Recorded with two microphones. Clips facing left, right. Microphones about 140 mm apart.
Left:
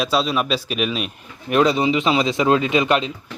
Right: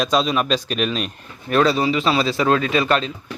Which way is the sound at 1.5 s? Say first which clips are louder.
Left 1 dB; 20° left (ahead or behind).